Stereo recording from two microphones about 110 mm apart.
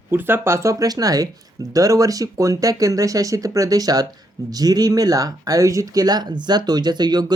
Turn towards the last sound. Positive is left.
turn(degrees=-40)  # may be behind; listen again after turning